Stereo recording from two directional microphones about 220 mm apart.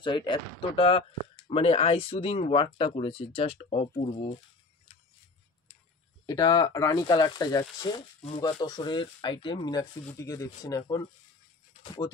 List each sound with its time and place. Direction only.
0.0 s speech: 20° left (ahead or behind)
6.2 s speech: 15° left (ahead or behind)